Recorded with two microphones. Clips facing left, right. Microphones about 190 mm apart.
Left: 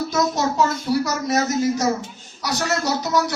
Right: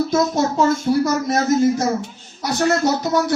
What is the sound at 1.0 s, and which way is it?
Speech, 50° right (ahead or behind).